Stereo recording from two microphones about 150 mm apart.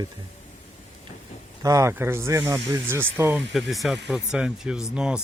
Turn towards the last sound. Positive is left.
turn(degrees=-5)  # may be behind; listen again after turning